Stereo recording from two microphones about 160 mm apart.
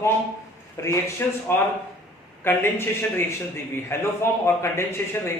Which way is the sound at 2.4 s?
15° left (ahead or behind).